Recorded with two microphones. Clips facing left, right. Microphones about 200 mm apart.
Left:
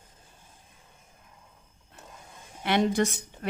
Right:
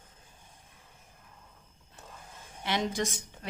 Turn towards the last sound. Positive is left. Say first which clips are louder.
# left 6 dB
turn(degrees=60)  # may be behind; listen again after turning